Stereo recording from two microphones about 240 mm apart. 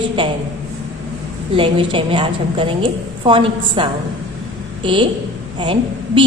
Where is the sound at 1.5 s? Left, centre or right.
Right.